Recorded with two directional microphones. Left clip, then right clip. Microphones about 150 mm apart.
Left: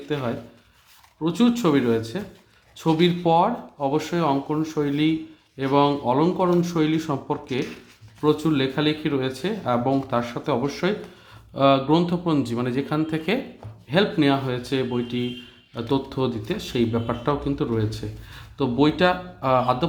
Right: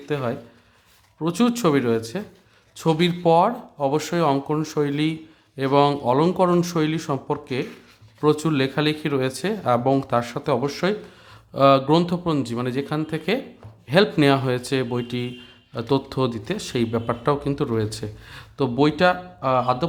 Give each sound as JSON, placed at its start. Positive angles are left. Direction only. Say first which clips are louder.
{"t": 0.1, "sound": "speech", "louder": "right 2 dB", "side_deg": -25}
{"t": 8.2, "sound": "speech", "louder": "right 1 dB", "side_deg": -35}
{"t": 13.8, "sound": "speech", "louder": "right 3 dB", "side_deg": -35}